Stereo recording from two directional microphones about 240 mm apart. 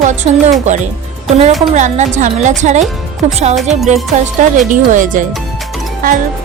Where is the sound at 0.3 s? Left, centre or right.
Right.